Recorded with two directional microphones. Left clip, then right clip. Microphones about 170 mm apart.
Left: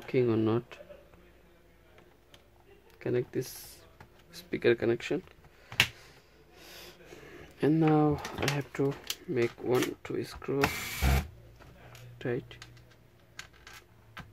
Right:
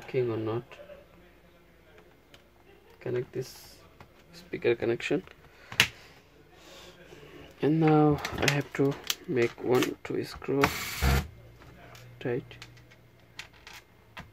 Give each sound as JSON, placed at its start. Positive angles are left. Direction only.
{"t": 0.0, "sound": "speech", "side_deg": 60}
{"t": 3.0, "sound": "speech", "side_deg": 55}
{"t": 4.9, "sound": "speech", "side_deg": 0}
{"t": 6.6, "sound": "gasp", "side_deg": 40}
{"t": 7.5, "sound": "speech", "side_deg": 20}
{"t": 8.2, "sound": "speech", "side_deg": -10}
{"t": 12.2, "sound": "speech", "side_deg": 10}